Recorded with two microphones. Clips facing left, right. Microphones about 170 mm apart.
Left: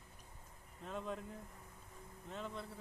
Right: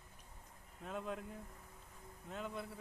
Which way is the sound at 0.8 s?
5° right (ahead or behind).